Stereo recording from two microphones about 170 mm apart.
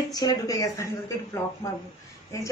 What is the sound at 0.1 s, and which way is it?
A woman's voice, 20° left (ahead or behind).